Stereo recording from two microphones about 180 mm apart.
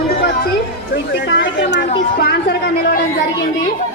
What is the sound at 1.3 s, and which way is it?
Speech, 90° left.